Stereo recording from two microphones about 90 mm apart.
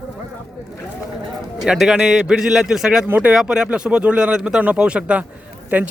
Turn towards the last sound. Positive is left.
turn(degrees=-20)  # may be behind; listen again after turning